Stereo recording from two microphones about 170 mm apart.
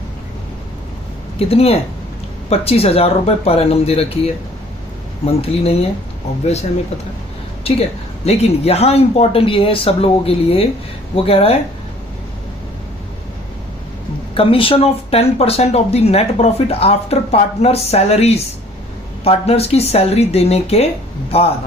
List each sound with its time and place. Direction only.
1.4 s speech: 35° left (ahead or behind)
14.3 s a man's voice: 30° left (ahead or behind)